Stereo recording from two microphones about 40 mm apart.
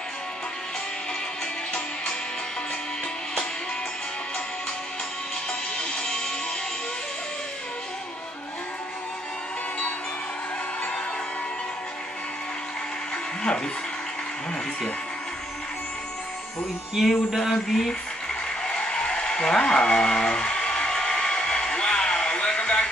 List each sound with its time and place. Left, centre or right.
5.5 s music: left
16.9 s speech: centre
18.6 s a sound: centre